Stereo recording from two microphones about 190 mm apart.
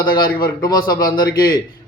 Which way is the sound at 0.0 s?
50° left (ahead or behind).